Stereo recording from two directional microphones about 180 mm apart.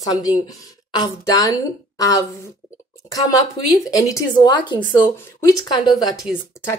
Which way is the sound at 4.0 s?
20° left (ahead or behind).